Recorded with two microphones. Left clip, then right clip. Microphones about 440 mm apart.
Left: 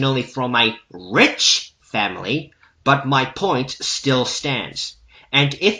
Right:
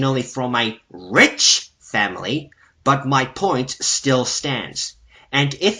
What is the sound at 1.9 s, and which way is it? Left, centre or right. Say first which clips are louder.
Speech: right 1 dB; centre.